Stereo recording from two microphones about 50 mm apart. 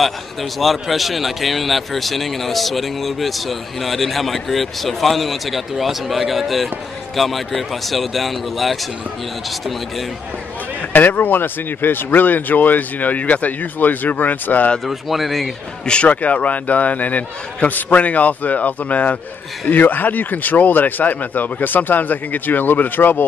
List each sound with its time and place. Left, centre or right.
0.0 s a man's voice: centre
10.9 s speech: left
14.9 s a man's voice: centre
15.8 s speech: centre
16.1 s speech: left